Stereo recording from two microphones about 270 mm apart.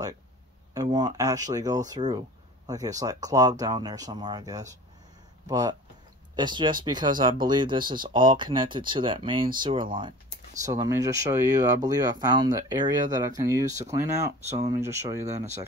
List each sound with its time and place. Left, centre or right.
0.7 s speech: centre